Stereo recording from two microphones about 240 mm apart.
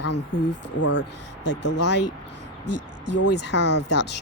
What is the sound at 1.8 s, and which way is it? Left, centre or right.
Speech, left.